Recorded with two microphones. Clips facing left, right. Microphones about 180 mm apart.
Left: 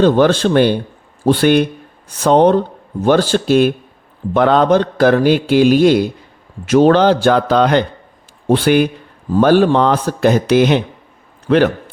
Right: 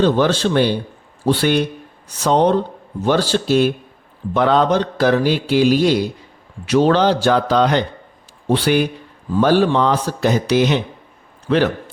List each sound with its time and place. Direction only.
0.0 s a man's voice: 55° left (ahead or behind)